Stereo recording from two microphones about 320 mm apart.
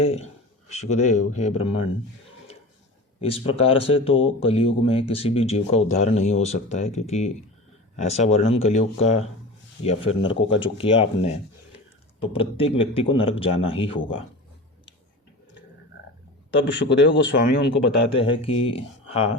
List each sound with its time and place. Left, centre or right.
0.0 s speech: centre
3.2 s a man's voice: centre
16.7 s speech: left
18.1 s a man's voice: centre